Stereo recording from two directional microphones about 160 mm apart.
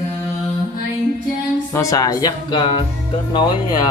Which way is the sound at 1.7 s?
20° left (ahead or behind).